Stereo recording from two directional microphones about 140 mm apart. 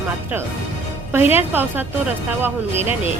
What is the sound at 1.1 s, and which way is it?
Speech, 15° right (ahead or behind).